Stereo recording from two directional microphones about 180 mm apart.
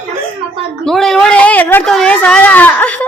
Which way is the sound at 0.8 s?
5° left (ahead or behind).